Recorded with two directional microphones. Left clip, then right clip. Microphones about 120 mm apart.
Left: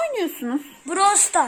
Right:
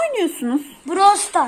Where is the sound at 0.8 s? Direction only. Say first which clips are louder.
Right 4 dB; 35° left (ahead or behind).